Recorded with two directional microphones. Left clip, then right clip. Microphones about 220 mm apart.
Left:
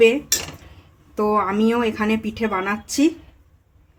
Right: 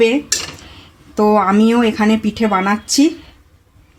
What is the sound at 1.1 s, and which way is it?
Speech, 35° right (ahead or behind).